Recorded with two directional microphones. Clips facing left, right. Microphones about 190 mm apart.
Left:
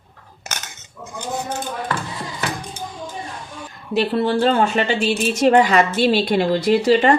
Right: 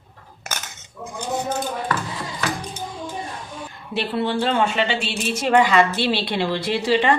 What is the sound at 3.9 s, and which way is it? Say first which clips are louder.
A woman's voice: left 5 dB; 40° left (ahead or behind).